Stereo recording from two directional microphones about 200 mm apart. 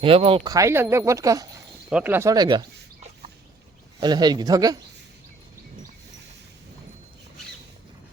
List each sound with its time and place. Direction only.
0.0 s speech: 30° right (ahead or behind)
4.0 s speech: 20° right (ahead or behind)